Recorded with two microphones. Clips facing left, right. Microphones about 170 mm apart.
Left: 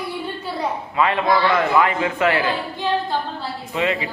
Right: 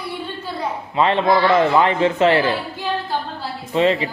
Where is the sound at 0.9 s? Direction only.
25° right (ahead or behind).